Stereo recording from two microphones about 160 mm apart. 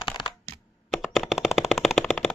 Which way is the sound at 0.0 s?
30° left (ahead or behind).